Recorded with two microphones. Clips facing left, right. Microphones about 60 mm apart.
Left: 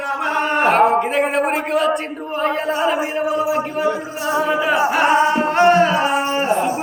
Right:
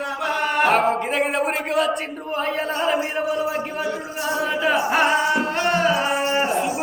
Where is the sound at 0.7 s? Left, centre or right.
Centre.